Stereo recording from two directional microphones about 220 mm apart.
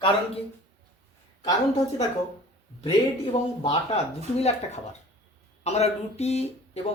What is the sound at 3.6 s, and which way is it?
Speech, 25° left (ahead or behind).